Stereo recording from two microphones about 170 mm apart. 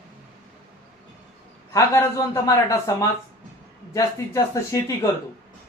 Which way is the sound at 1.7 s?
20° left (ahead or behind).